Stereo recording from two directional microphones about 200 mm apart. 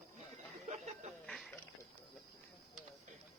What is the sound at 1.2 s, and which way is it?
Music, 5° left (ahead or behind).